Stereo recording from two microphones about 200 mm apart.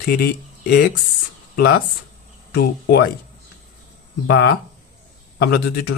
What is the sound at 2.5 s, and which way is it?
Speech, 55° left (ahead or behind).